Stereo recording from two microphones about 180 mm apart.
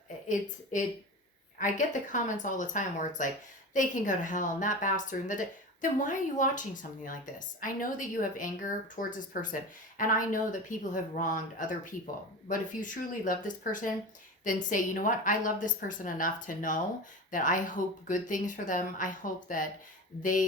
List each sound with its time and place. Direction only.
0.3 s a woman's voice: 45° left (ahead or behind)